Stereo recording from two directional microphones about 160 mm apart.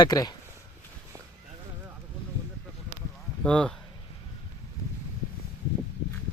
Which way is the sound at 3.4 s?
5° left (ahead or behind).